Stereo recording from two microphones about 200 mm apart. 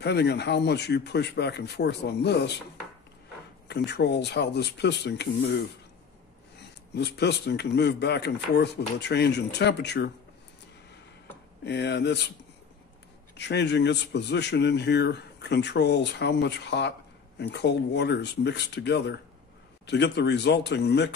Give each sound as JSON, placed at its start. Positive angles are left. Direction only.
{"t": 0.0, "sound": "speech", "side_deg": 55}
{"t": 3.6, "sound": "speech", "side_deg": 55}
{"t": 7.0, "sound": "speech", "side_deg": 55}
{"t": 11.6, "sound": "speech", "side_deg": 60}
{"t": 13.4, "sound": "speech", "side_deg": 60}